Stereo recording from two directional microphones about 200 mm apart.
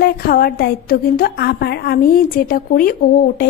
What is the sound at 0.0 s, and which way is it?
A woman's voice, 50° left (ahead or behind).